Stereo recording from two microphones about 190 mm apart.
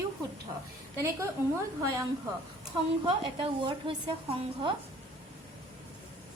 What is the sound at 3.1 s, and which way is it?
Speech, 25° right (ahead or behind).